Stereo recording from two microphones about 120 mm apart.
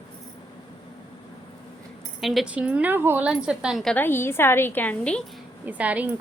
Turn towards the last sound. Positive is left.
turn(degrees=-10)  # may be behind; listen again after turning